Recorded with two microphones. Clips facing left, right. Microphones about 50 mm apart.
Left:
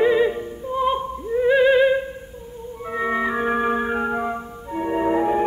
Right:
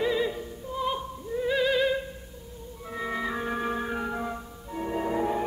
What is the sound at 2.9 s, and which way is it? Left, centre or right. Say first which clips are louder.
Music: left 8 dB; left.